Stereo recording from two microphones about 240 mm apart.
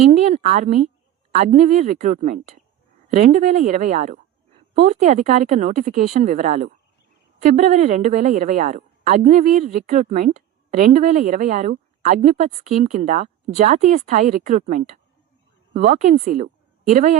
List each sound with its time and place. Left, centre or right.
0.0 s a woman's voice: right